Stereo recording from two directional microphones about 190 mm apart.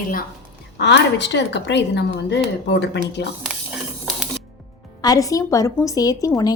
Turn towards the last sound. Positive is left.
turn(degrees=20)  # may be behind; listen again after turning